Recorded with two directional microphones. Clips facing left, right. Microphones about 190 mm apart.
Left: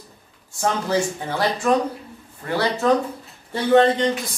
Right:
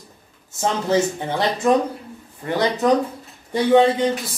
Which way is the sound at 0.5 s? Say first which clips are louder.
Right 2 dB; 20° right (ahead or behind).